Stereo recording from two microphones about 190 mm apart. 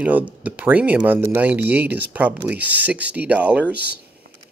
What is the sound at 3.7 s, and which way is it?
Speech, 60° right (ahead or behind).